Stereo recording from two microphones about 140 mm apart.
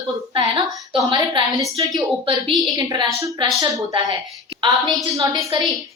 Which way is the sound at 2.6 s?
30° right (ahead or behind).